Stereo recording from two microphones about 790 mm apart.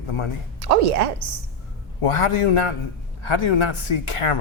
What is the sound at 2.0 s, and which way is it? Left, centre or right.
Speech, left.